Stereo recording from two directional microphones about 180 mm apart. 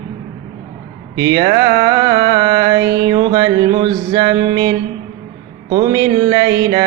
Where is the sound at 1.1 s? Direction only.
20° right (ahead or behind).